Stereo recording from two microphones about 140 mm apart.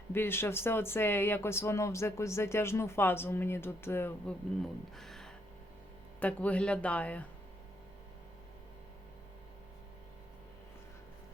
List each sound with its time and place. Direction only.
0.1 s speech: 15° left (ahead or behind)
4.9 s music: centre (ahead or behind)
6.1 s speech: 10° left (ahead or behind)